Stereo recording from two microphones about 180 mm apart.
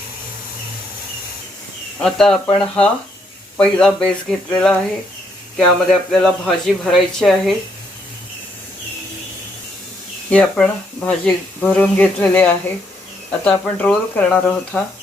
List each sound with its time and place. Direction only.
2.0 s speech: 5° left (ahead or behind)
10.2 s speech: 5° left (ahead or behind)